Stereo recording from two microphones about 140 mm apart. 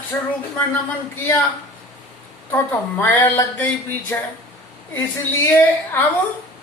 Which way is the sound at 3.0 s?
15° left (ahead or behind).